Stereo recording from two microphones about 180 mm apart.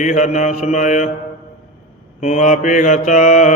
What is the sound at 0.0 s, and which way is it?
Mantra, 45° left (ahead or behind).